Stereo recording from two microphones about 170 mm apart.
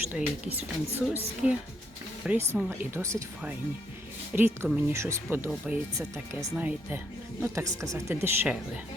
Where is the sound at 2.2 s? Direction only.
10° right (ahead or behind).